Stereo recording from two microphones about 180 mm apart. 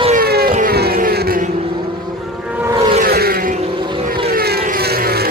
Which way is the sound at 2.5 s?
15° right (ahead or behind).